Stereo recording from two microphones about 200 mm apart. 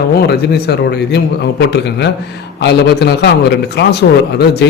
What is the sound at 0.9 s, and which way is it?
A man's voice, 55° left (ahead or behind).